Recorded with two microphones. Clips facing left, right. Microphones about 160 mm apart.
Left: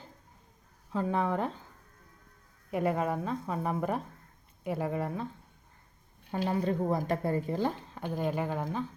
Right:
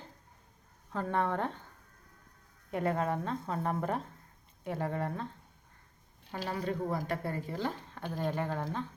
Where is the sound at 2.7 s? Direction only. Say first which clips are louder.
Left 2 dB; 5° left (ahead or behind).